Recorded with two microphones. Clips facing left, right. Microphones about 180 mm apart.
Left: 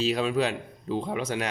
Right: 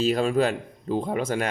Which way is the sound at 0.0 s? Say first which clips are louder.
Right 3 dB; 45° right (ahead or behind).